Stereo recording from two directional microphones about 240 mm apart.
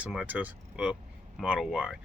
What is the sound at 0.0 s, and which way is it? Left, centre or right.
Speech, centre.